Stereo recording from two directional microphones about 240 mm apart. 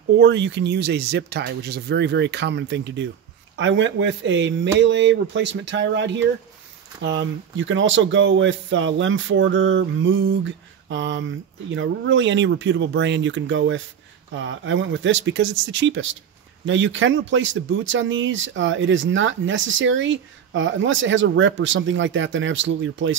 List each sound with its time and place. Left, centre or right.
0.2 s speech: right